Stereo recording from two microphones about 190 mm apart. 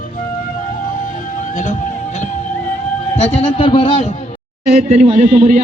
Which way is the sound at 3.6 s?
30° left (ahead or behind).